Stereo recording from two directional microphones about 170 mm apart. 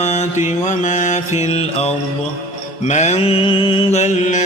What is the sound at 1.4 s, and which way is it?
Music, 40° left (ahead or behind).